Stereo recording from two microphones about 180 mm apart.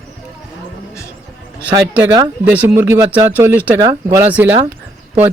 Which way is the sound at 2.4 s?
10° right (ahead or behind).